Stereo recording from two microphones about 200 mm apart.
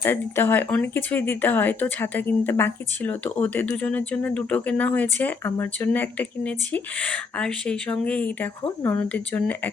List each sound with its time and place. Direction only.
0.0 s speech: 10° left (ahead or behind)